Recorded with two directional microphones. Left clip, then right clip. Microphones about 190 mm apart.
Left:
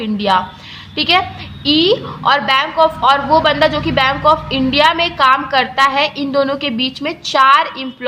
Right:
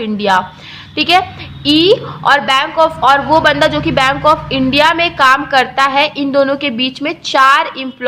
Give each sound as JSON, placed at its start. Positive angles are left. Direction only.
{"t": 0.0, "sound": "a woman's voice", "side_deg": -20}